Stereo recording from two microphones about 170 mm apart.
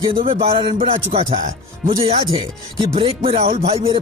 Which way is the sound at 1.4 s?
55° right (ahead or behind).